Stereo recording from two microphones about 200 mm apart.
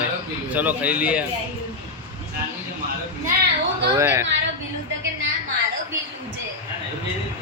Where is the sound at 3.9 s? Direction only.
10° right (ahead or behind).